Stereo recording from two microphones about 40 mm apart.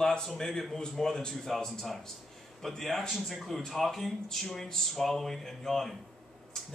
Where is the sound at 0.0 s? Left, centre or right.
Centre.